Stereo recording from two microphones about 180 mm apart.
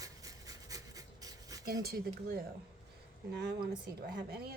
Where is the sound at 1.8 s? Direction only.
60° right (ahead or behind).